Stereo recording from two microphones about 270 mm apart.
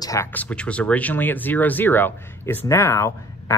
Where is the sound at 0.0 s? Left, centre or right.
Centre.